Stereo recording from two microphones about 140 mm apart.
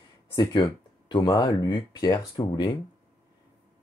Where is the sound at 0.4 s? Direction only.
30° left (ahead or behind).